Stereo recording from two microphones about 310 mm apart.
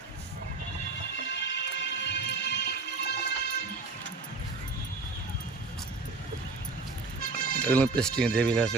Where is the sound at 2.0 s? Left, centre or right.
Left.